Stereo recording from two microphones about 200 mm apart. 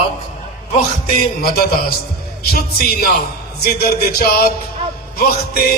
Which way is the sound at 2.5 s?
50° left (ahead or behind).